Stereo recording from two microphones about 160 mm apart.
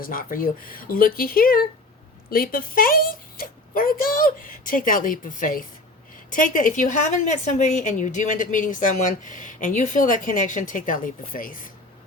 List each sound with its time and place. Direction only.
0.0 s a woman's voice: 60° left (ahead or behind)